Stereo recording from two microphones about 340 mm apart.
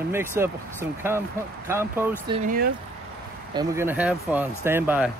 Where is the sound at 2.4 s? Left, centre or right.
Right.